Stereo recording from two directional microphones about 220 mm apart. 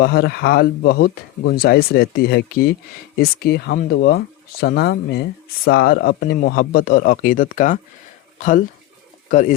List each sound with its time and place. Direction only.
0.0 s speech: 45° left (ahead or behind)